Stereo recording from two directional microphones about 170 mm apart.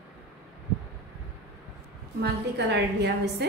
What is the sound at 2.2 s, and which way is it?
A woman's voice, 80° right.